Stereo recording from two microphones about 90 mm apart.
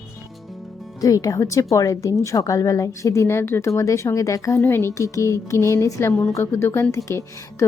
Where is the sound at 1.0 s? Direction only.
40° left (ahead or behind).